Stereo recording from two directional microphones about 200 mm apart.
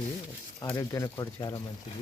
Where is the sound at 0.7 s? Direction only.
15° left (ahead or behind).